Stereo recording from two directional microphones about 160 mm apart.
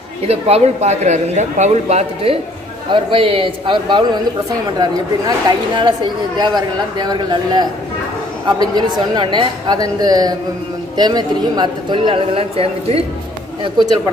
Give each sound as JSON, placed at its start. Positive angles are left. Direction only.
{"t": 0.3, "sound": "a man's voice", "side_deg": -40}
{"t": 5.8, "sound": "a man's voice", "side_deg": -30}